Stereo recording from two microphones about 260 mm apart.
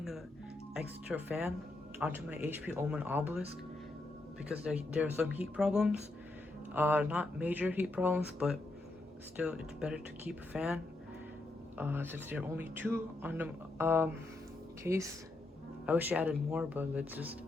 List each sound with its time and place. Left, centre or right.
0.7 s speech: centre
4.4 s speech: centre
11.8 s speech: centre